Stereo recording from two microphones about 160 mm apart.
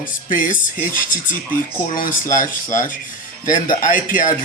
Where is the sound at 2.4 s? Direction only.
55° left (ahead or behind).